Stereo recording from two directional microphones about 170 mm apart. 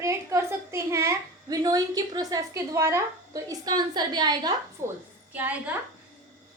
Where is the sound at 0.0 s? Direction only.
15° right (ahead or behind).